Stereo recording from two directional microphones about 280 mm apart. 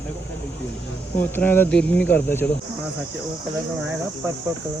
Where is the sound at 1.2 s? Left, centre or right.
Centre.